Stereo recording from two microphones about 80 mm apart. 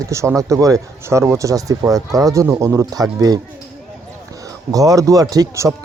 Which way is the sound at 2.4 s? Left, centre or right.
Right.